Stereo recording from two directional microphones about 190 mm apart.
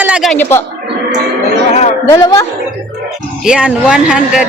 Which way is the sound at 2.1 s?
15° left (ahead or behind).